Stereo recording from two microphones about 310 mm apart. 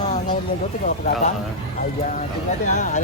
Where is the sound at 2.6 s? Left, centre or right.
Left.